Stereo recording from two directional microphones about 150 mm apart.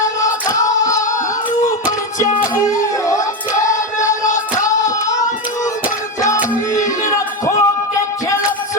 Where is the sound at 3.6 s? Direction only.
20° left (ahead or behind).